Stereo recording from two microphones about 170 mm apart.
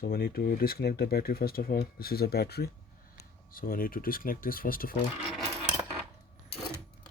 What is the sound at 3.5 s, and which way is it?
Speech, 55° left (ahead or behind).